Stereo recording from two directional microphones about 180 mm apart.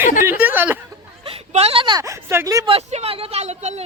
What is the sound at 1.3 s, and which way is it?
A woman's voice, 35° right (ahead or behind).